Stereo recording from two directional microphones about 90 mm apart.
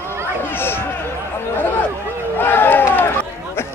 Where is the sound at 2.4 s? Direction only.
20° left (ahead or behind).